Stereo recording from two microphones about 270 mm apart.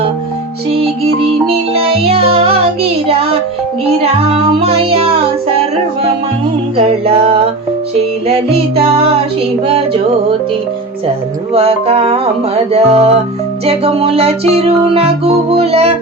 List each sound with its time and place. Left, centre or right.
1.7 s music: right
4.6 s music: right
6.7 s music: right
11.5 s music: right